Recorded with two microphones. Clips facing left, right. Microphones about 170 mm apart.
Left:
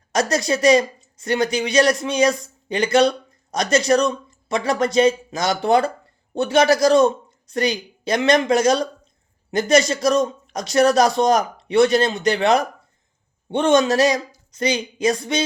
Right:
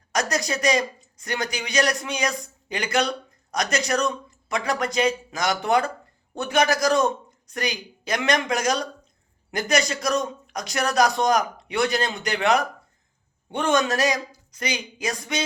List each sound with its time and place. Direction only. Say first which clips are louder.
0.1 s speech: left 5 dB; 30° left (ahead or behind)